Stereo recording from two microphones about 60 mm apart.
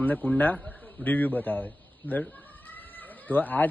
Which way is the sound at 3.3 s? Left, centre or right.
Left.